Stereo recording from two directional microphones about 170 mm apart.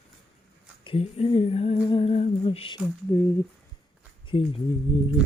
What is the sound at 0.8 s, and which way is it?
Humming, 35° left (ahead or behind).